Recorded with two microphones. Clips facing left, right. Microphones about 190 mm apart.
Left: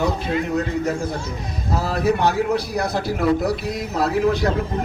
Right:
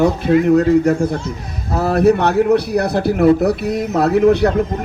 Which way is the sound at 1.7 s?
60° right (ahead or behind).